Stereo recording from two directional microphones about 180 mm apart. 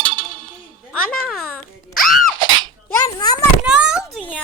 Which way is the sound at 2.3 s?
25° right (ahead or behind).